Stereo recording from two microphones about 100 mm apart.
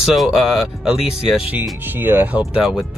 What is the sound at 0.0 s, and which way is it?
Speech, centre (ahead or behind).